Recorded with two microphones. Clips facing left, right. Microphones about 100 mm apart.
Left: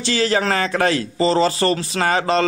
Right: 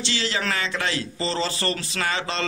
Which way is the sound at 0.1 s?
40° left (ahead or behind).